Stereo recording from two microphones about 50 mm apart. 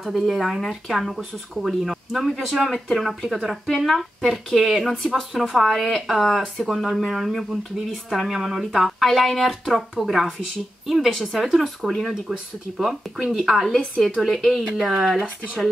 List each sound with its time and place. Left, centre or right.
0.0 s speech: centre
15.1 s speech: right